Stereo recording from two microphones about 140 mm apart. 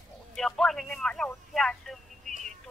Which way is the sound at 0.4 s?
5° left (ahead or behind).